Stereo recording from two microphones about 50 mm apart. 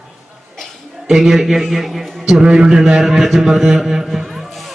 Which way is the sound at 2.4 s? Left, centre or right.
Centre.